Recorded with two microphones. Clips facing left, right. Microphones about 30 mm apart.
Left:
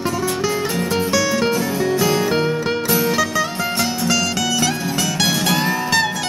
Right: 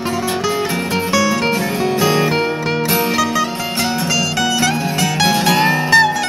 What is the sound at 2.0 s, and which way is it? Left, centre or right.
Music, right.